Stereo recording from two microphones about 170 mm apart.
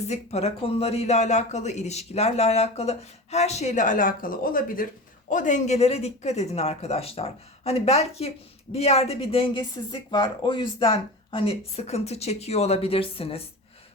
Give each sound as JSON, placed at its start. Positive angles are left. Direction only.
{"t": 0.0, "sound": "speech", "side_deg": 40}